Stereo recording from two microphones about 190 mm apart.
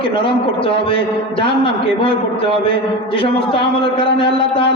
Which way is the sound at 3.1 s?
25° left (ahead or behind).